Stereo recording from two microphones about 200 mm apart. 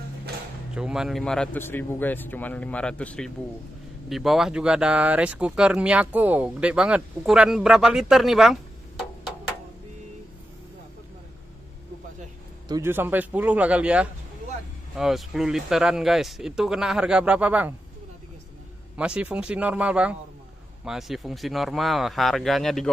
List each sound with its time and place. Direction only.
0.7 s a man's voice: 5° right (ahead or behind)
12.6 s a man's voice: 15° right (ahead or behind)
18.9 s a man's voice: 5° right (ahead or behind)